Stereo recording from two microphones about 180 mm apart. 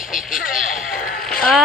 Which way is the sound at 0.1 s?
50° left (ahead or behind).